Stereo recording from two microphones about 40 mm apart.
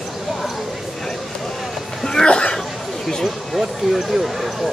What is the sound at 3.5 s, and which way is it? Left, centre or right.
Speech, centre.